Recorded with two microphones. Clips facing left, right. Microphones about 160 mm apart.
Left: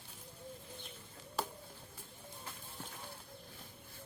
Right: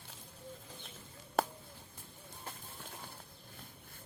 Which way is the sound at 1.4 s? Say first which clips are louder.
Right 7 dB; 55° right (ahead or behind).